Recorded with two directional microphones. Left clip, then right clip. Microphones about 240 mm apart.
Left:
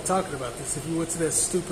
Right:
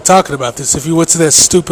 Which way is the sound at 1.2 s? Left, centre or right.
Right.